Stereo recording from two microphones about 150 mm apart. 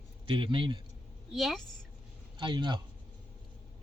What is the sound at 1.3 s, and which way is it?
Speech, centre (ahead or behind).